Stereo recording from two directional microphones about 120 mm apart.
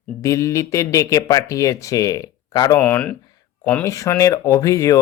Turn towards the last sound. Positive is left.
turn(degrees=30)  # may be behind; listen again after turning